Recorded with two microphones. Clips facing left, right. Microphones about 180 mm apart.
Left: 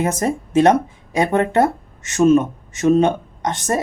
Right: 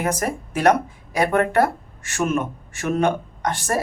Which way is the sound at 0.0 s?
25° left (ahead or behind).